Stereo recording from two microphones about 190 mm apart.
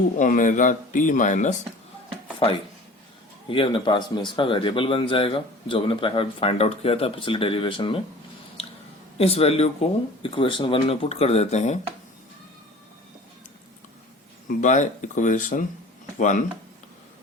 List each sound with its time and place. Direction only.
0.2 s speech: 45° left (ahead or behind)
3.5 s speech: 25° left (ahead or behind)
9.1 s speech: 30° left (ahead or behind)
14.6 s speech: 40° left (ahead or behind)